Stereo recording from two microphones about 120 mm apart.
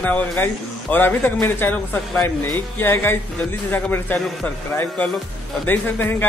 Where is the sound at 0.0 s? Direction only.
10° left (ahead or behind).